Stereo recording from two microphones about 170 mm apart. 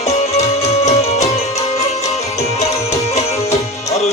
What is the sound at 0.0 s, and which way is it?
Music, 40° left (ahead or behind).